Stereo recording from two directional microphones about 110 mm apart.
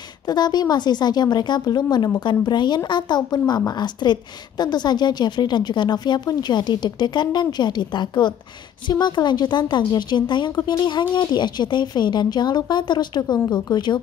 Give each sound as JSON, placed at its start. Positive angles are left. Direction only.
{"t": 0.3, "sound": "a woman's voice", "side_deg": 40}